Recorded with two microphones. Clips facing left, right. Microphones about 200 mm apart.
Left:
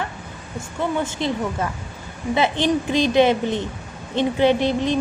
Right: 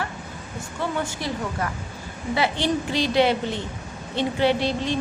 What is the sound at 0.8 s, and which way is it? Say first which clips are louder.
A woman's voice: left 4 dB; 20° left (ahead or behind).